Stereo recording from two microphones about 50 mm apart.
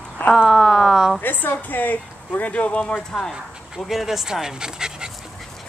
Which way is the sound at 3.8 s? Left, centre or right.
Centre.